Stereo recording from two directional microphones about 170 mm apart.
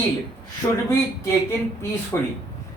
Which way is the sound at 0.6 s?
25° left (ahead or behind).